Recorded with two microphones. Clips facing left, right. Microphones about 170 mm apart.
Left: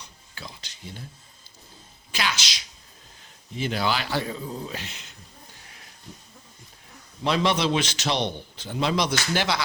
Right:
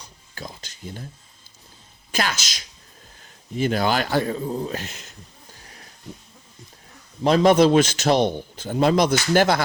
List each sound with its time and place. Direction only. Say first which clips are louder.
0.3 s a man's voice: right 5 dB; 45° right (ahead or behind)
2.1 s a man's voice: right 4 dB; 45° right (ahead or behind)
7.3 s a man's voice: right 8 dB; 45° right (ahead or behind)